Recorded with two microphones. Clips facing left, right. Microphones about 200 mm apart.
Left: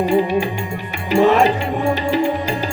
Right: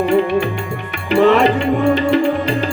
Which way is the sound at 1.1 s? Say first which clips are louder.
Right 2 dB; 60° right (ahead or behind).